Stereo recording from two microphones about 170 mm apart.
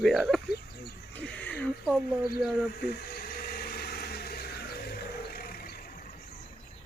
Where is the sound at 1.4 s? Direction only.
10° left (ahead or behind).